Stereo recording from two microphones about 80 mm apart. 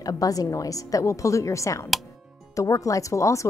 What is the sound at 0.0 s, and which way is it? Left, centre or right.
Speech, left.